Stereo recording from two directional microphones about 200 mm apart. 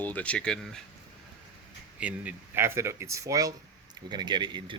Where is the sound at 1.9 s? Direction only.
5° right (ahead or behind).